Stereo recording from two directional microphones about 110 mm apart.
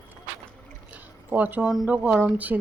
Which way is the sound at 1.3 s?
15° right (ahead or behind).